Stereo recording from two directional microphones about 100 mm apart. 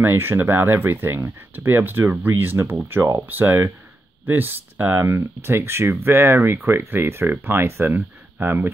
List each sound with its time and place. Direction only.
0.0 s speech: 25° right (ahead or behind)